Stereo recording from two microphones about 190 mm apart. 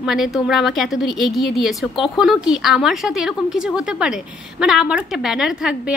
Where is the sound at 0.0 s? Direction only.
Centre (ahead or behind).